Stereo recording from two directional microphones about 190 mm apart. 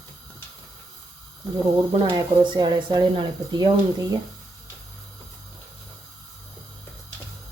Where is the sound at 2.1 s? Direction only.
25° right (ahead or behind).